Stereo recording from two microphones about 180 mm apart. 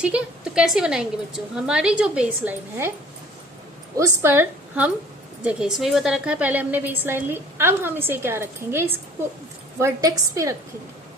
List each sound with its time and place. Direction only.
0.0 s a woman's voice: 5° right (ahead or behind)
3.9 s a woman's voice: 15° right (ahead or behind)